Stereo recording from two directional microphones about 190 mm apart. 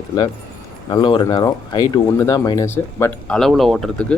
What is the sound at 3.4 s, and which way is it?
Speech, centre (ahead or behind).